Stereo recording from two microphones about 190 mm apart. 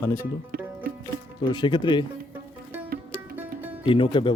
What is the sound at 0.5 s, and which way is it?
Music, 50° right (ahead or behind).